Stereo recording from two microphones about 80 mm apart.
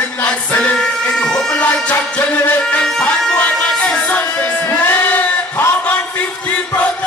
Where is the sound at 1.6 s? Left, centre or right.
Centre.